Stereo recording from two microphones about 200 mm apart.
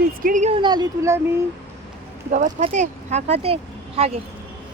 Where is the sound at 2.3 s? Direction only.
35° right (ahead or behind).